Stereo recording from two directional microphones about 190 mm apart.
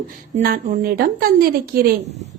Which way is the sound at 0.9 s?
50° right (ahead or behind).